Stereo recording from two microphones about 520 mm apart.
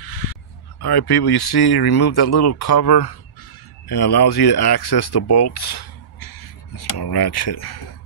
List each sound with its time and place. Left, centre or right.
0.1 s speech: left
5.5 s a sound: left
6.8 s speech: left